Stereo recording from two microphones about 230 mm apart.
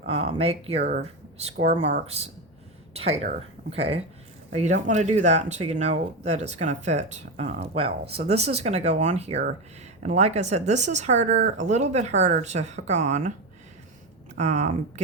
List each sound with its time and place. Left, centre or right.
0.0 s speech: right
0.8 s speech: right
14.3 s speech: right